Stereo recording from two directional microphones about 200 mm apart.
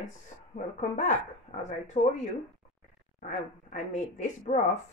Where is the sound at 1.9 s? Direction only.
35° left (ahead or behind).